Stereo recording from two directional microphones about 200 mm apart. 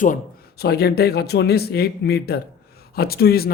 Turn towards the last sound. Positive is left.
turn(degrees=50)  # may be behind; listen again after turning